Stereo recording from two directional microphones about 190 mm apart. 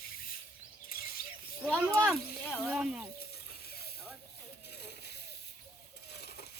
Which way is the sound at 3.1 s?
55° left (ahead or behind).